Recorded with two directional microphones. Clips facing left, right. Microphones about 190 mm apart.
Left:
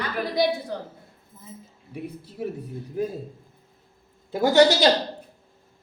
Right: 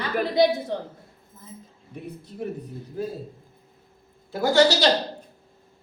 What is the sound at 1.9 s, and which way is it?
Speech, 5° left (ahead or behind).